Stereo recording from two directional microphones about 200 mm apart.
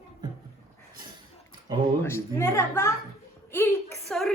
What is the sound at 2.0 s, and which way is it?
Speech, 15° left (ahead or behind).